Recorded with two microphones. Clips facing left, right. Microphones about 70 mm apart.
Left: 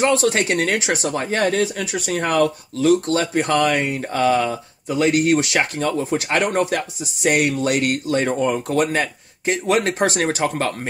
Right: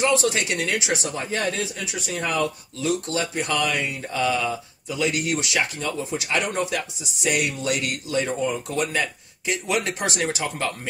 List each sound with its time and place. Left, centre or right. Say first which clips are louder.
0.0 s speech: left 4 dB; left
3.3 s speech: left 7 dB; left